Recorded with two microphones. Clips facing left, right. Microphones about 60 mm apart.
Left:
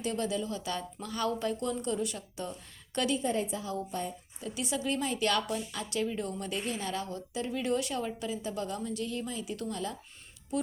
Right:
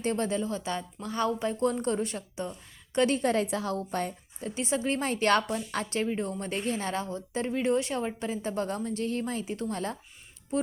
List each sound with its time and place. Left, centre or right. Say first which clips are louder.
0.0 s a woman's voice: right 4 dB; right
2.3 s a woman's voice: right 3 dB; right
3.2 s a woman's voice: right 5 dB; right
4.4 s a woman's voice: right 4 dB; right